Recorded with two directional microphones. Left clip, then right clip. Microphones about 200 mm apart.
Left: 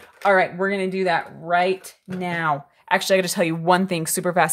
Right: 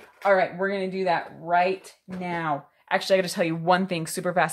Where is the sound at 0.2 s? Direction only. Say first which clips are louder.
Left 3 dB; 30° left (ahead or behind).